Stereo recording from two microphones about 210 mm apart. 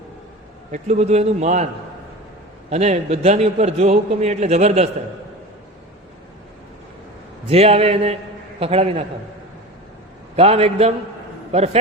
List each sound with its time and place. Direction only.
0.7 s a man's voice: 30° right (ahead or behind)
2.6 s a man's voice: 30° right (ahead or behind)
7.4 s a man's voice: 30° right (ahead or behind)
10.3 s a man's voice: 30° right (ahead or behind)